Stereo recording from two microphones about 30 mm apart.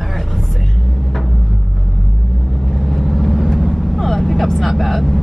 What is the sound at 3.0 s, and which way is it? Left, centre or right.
Vehicle, centre.